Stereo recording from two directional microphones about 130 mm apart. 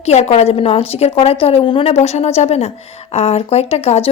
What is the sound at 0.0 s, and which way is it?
Speech, 55° left (ahead or behind).